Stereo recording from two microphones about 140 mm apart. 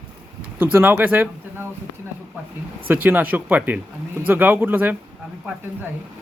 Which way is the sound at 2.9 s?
15° right (ahead or behind).